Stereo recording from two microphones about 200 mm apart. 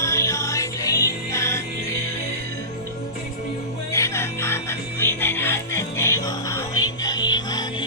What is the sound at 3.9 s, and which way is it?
Music, 15° left (ahead or behind).